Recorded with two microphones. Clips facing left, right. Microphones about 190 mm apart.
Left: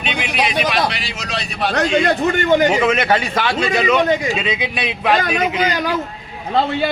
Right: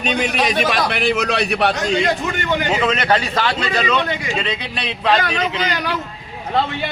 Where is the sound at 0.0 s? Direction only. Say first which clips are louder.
Right 2 dB; 40° right (ahead or behind); by 1.7 s 65° right (ahead or behind).